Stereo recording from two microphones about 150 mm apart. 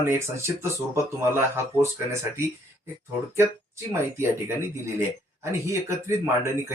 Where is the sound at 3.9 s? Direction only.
15° right (ahead or behind).